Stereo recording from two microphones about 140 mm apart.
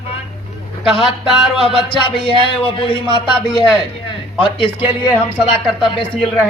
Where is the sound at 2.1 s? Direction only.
40° left (ahead or behind).